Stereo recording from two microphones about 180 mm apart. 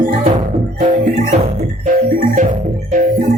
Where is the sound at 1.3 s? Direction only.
40° right (ahead or behind).